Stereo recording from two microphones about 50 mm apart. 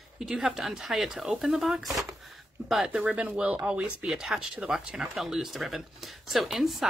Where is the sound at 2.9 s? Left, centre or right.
Right.